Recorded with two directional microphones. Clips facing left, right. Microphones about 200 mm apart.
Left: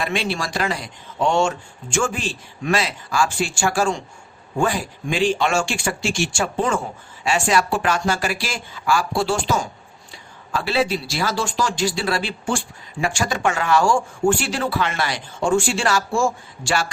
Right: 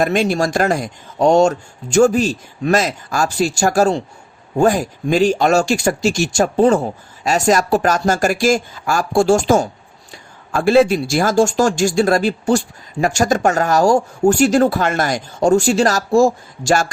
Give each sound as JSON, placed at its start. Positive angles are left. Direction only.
{"t": 0.0, "sound": "speech", "side_deg": -45}